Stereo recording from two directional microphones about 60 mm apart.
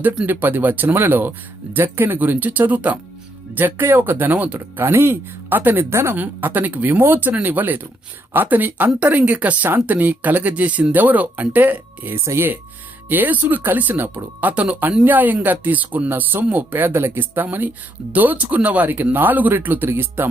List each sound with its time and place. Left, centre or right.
0.3 s speech: right
4.8 s speech: right
5.9 s speech: right
6.1 s speech: right
12.1 s speech: right
13.1 s speech: right